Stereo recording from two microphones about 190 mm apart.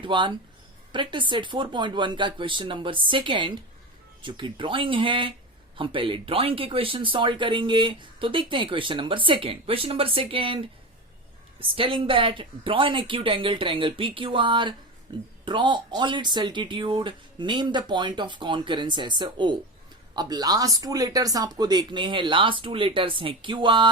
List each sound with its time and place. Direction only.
0.0 s speech: 25° right (ahead or behind)
11.7 s speech: 30° right (ahead or behind)